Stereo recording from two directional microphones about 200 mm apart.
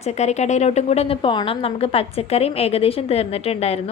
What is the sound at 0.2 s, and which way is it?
A woman's voice, 35° left (ahead or behind).